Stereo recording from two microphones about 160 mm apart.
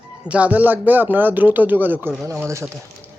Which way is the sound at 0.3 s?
10° right (ahead or behind).